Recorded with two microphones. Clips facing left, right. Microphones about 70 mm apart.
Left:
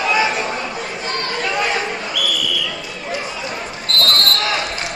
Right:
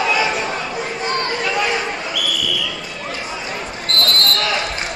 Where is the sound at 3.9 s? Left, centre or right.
Right.